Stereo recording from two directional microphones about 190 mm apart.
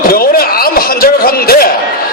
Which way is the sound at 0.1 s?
50° left (ahead or behind).